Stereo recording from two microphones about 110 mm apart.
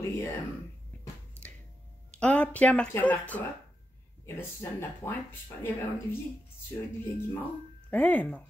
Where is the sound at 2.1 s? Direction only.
10° left (ahead or behind).